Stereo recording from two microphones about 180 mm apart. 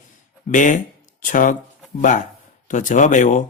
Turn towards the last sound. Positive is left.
turn(degrees=45)  # may be behind; listen again after turning